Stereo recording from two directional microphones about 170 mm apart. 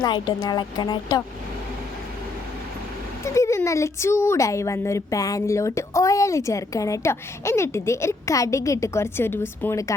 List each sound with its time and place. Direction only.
0.0 s speech: 25° left (ahead or behind)
3.2 s speech: 15° left (ahead or behind)